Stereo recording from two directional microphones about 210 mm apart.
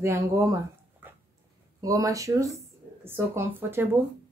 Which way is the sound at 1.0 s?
10° right (ahead or behind).